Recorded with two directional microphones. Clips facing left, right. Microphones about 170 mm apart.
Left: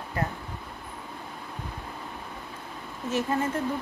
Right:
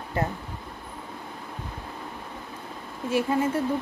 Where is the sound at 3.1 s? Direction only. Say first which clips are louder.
Right 3 dB; 10° right (ahead or behind).